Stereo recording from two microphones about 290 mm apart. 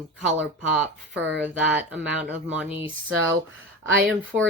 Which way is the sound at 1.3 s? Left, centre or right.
Centre.